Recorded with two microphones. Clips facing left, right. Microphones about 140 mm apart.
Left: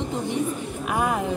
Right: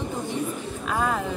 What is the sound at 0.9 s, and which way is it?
Speech, 15° left (ahead or behind).